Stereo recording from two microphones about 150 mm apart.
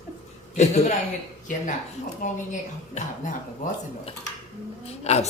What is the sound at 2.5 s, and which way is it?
Speech, 55° left (ahead or behind).